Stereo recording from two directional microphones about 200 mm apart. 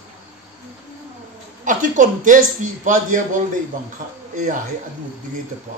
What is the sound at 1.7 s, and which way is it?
A man's voice, 40° right (ahead or behind).